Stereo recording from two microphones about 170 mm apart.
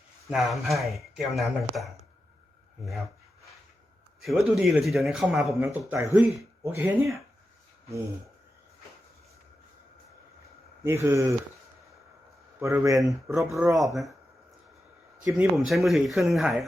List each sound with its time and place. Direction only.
0.3 s speech: centre (ahead or behind)
4.2 s speech: centre (ahead or behind)
5.6 s speech: 15° right (ahead or behind)
10.8 s speech: 15° right (ahead or behind)
13.2 s speech: centre (ahead or behind)
13.5 s speech: 20° right (ahead or behind)
13.7 s speech: centre (ahead or behind)
15.2 s speech: 5° right (ahead or behind)